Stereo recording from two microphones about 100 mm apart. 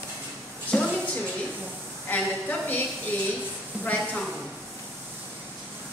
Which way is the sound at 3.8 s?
15° left (ahead or behind).